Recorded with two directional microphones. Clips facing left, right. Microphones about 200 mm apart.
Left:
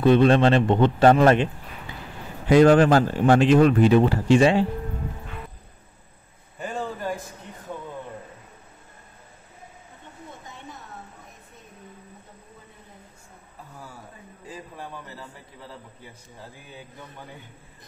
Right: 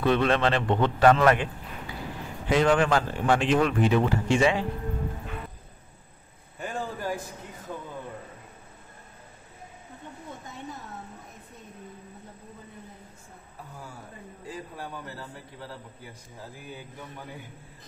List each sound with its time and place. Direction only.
0.2 s a man's voice: 30° left (ahead or behind)
2.5 s speech: 40° left (ahead or behind)